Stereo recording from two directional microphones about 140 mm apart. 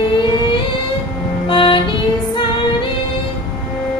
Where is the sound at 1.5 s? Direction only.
35° left (ahead or behind).